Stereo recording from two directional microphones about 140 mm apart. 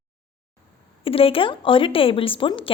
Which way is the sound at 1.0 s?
40° left (ahead or behind).